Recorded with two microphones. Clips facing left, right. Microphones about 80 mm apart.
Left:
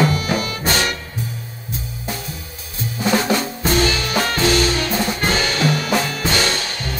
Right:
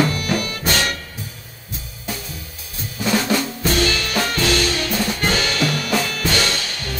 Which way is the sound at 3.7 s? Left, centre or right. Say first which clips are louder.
Left 2 dB; left.